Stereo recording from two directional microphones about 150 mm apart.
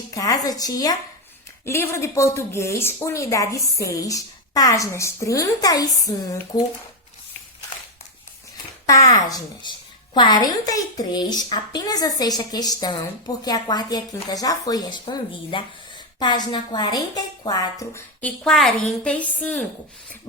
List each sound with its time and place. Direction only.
0.1 s a woman's voice: 25° left (ahead or behind)
8.9 s a woman's voice: 25° left (ahead or behind)
18.2 s a woman's voice: 5° left (ahead or behind)